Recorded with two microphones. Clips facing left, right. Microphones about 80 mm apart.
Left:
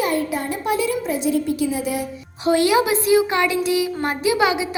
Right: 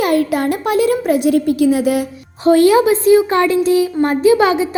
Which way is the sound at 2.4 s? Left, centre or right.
Right.